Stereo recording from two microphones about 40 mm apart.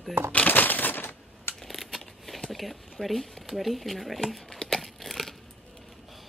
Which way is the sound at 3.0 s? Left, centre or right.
Centre.